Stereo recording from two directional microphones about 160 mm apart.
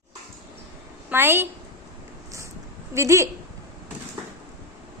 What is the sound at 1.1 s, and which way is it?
Speech, 15° right (ahead or behind).